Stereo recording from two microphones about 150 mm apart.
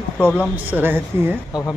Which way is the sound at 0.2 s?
10° left (ahead or behind).